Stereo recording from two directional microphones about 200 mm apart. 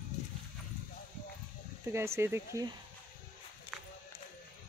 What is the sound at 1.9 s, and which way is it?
Speech, 15° right (ahead or behind).